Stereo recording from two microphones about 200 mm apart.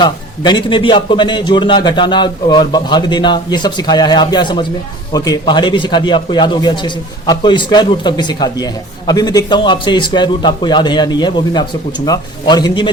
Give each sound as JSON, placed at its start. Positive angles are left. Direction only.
{"t": 0.0, "sound": "a man's voice", "side_deg": 25}